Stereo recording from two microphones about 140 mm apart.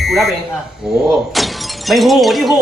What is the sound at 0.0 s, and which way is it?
Smoke detector, centre (ahead or behind).